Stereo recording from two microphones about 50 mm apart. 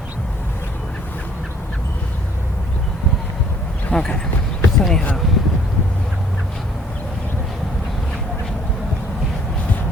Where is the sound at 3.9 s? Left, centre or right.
Left.